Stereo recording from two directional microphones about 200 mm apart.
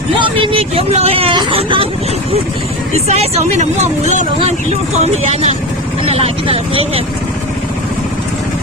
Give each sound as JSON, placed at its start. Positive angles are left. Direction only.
{"t": 0.2, "sound": "vehicle", "side_deg": -25}
{"t": 3.1, "sound": "speech", "side_deg": -30}